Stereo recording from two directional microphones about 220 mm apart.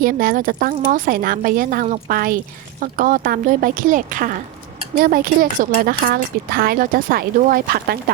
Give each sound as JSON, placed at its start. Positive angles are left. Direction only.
{"t": 0.0, "sound": "speech", "side_deg": -40}